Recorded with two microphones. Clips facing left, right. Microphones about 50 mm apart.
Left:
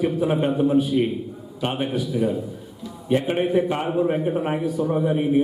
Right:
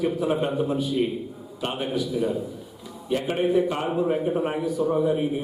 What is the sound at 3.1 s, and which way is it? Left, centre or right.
A man's voice, left.